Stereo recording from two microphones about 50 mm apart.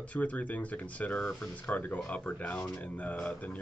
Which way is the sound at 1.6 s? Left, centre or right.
Left.